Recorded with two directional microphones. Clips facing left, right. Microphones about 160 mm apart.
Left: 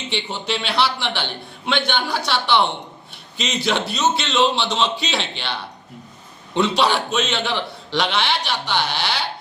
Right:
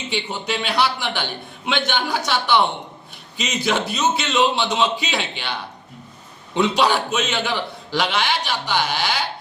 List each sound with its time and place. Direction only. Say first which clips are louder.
0.1 s a man's voice: even; 5° right (ahead or behind)
6.5 s a man's voice: even; 5° right (ahead or behind)